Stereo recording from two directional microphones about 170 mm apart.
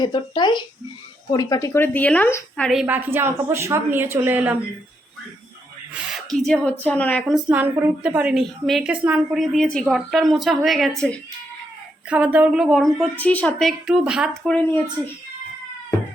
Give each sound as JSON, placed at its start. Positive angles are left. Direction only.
{"t": 0.0, "sound": "a woman's voice", "side_deg": 25}
{"t": 2.8, "sound": "a woman's voice", "side_deg": -10}
{"t": 5.9, "sound": "a woman's voice", "side_deg": 0}
{"t": 7.5, "sound": "a woman's voice", "side_deg": -10}
{"t": 12.0, "sound": "a woman's voice", "side_deg": -10}
{"t": 14.4, "sound": "a woman's voice", "side_deg": 10}